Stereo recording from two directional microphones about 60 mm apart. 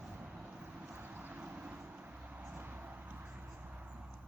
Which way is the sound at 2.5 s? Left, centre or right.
Right.